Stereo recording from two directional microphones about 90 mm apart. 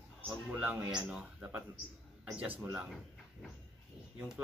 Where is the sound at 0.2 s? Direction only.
15° right (ahead or behind).